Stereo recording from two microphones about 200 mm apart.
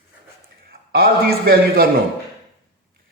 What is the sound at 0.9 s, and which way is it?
Speech, 50° right (ahead or behind).